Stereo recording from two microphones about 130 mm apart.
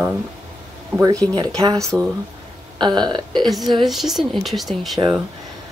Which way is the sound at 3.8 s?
Centre (ahead or behind).